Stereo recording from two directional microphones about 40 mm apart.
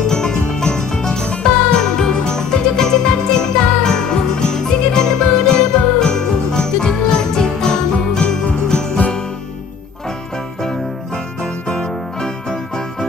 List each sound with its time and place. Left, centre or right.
0.0 s music: centre
11.4 s music: centre